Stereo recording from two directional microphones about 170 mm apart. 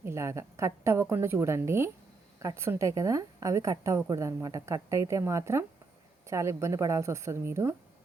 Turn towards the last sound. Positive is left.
turn(degrees=-15)  # may be behind; listen again after turning